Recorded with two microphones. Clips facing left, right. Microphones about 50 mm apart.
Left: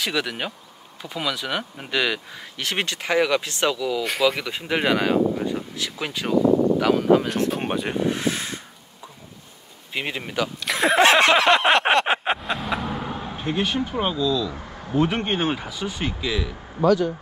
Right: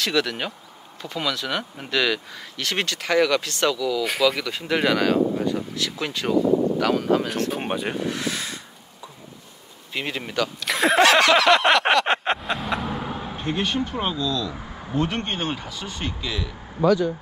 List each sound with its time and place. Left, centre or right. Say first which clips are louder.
0.0 s speech: right 2 dB; centre
4.0 s speech: even; centre
4.5 s speech: even; centre
8.0 s speech: left 3 dB; left
9.9 s speech: even; centre
10.7 s a sound: even; centre
11.0 s a sound: even; left
12.1 s speech: even; centre